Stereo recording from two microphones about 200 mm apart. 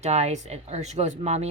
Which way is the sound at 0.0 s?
35° right (ahead or behind).